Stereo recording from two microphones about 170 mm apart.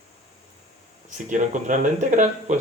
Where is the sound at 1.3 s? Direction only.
45° right (ahead or behind).